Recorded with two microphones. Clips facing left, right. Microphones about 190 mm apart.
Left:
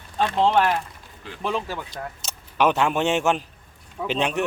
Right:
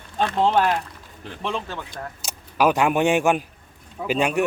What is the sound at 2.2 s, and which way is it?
A man's voice, 10° right (ahead or behind).